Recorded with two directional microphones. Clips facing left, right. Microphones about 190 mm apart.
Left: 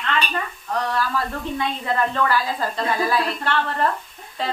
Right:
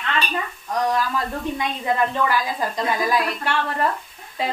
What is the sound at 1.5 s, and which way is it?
A woman's voice, 15° right (ahead or behind).